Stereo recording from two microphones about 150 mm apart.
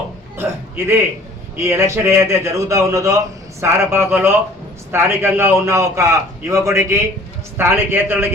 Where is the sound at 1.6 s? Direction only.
20° right (ahead or behind).